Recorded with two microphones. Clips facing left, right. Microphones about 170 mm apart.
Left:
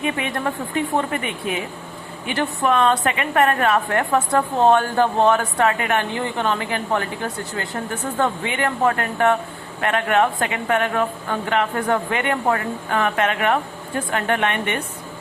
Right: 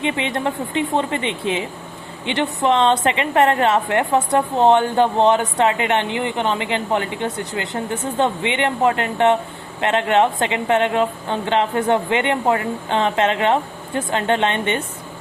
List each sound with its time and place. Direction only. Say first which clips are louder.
0.0 s a woman's voice: right 2 dB; 25° right (ahead or behind)